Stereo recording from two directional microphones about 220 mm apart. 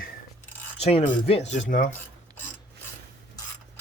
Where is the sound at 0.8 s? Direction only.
30° left (ahead or behind).